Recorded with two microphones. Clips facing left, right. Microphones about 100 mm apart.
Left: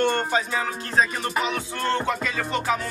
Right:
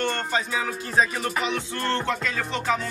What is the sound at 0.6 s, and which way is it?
Music, centre (ahead or behind).